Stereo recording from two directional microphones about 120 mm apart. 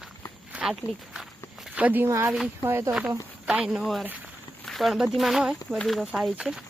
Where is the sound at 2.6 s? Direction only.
20° right (ahead or behind).